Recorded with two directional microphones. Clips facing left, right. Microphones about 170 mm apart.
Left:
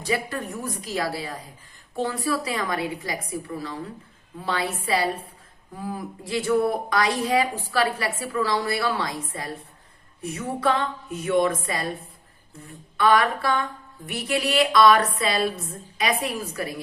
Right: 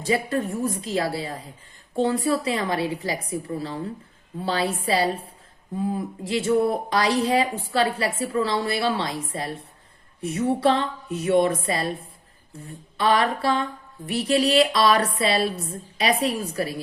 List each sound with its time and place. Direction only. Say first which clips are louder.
0.0 s a woman's voice: right 4 dB; 25° right (ahead or behind)
13.0 s a woman's voice: left 1 dB; 25° right (ahead or behind)